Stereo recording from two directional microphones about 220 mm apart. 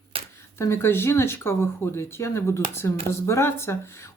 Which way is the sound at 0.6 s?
10° left (ahead or behind).